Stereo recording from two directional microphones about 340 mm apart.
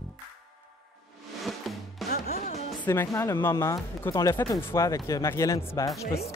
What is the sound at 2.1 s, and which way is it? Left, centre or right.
Music, left.